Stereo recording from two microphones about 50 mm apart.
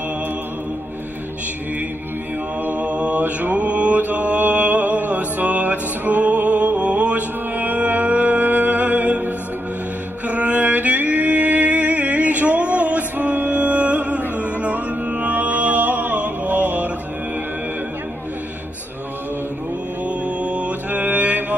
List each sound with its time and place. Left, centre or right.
2.6 s mantra: right
10.2 s music: right
20.1 s mantra: right